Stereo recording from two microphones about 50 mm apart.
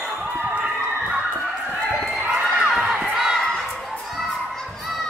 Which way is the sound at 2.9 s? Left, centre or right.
Centre.